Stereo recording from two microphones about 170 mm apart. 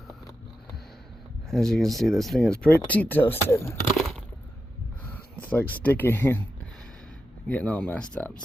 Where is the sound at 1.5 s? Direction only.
5° left (ahead or behind).